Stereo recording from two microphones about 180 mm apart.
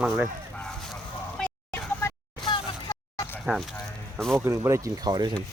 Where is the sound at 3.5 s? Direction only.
10° right (ahead or behind).